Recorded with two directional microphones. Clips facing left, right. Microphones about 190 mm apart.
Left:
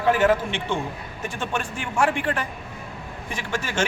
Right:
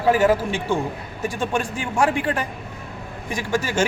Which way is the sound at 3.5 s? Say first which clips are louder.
Right 5 dB; 10° right (ahead or behind).